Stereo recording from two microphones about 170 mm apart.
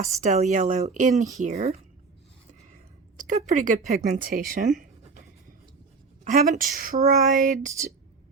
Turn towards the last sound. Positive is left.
turn(degrees=-45)  # may be behind; listen again after turning